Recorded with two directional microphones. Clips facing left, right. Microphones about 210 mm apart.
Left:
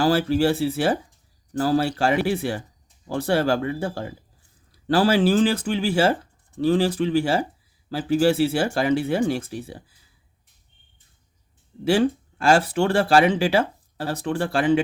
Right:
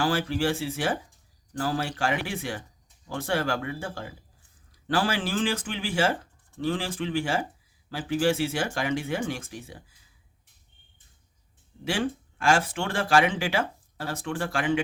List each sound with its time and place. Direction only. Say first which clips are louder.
0.0 s speech: left 6 dB; 35° left (ahead or behind)
11.9 s speech: left 9 dB; 35° left (ahead or behind)